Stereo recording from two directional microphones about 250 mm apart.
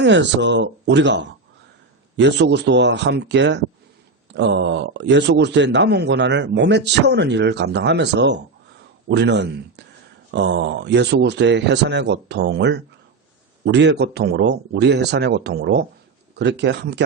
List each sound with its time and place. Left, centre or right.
0.0 s speech: right